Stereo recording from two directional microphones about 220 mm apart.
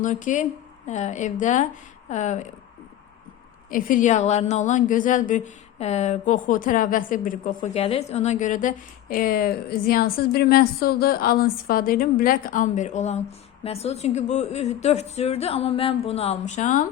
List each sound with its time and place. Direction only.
0.0 s a woman's voice: 35° left (ahead or behind)
3.7 s a woman's voice: 40° left (ahead or behind)